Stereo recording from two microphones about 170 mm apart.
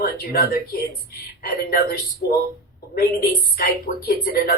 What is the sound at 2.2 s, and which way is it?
Speech, 80° left.